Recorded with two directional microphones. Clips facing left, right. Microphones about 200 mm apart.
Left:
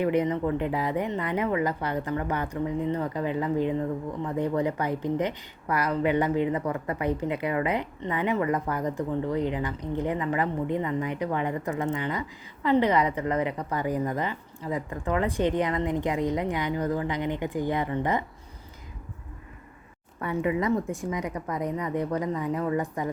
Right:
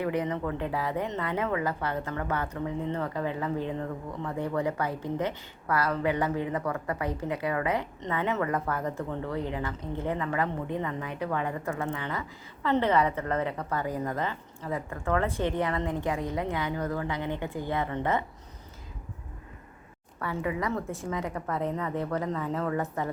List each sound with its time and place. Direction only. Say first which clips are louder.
0.0 s a woman's voice: left 5 dB; 20° left (ahead or behind)
20.2 s a woman's voice: left 5 dB; 20° left (ahead or behind)